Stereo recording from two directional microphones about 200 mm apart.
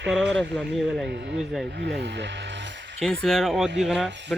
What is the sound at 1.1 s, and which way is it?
Speech, 55° right (ahead or behind).